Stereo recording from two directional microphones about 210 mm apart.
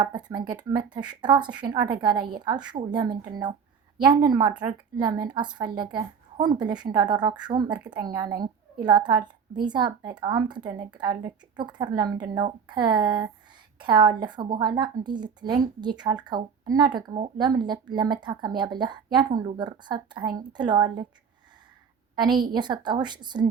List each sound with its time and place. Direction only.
0.0 s a woman's voice: 20° right (ahead or behind)
22.1 s a woman's voice: 20° right (ahead or behind)